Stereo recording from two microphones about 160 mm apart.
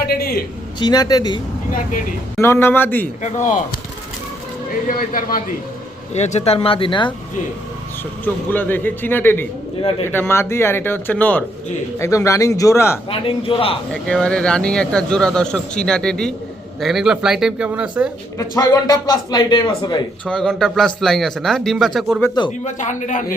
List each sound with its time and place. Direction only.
0.0 s a sound: 75° left (ahead or behind)
0.8 s a man's voice: 25° left (ahead or behind)
2.4 s speech: 15° left (ahead or behind)
3.2 s speech: 50° left (ahead or behind)
4.9 s a man's voice: 60° left (ahead or behind)
6.1 s speech: 45° left (ahead or behind)
8.2 s a man's voice: 10° left (ahead or behind)
13.1 s speech: 35° left (ahead or behind)
13.9 s a man's voice: 5° left (ahead or behind)
18.3 s a man's voice: 20° left (ahead or behind)
20.2 s a man's voice: 5° left (ahead or behind)
22.6 s speech: 50° left (ahead or behind)